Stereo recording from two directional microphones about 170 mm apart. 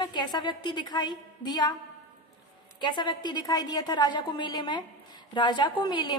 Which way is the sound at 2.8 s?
25° left (ahead or behind).